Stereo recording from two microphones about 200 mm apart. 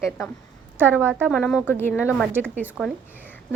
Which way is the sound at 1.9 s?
5° right (ahead or behind).